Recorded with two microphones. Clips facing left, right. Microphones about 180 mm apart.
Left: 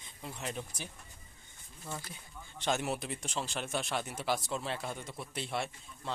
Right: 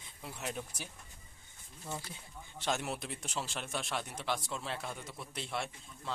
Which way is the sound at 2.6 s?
Centre (ahead or behind).